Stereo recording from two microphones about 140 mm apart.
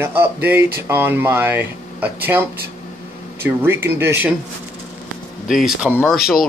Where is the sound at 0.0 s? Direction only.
15° right (ahead or behind).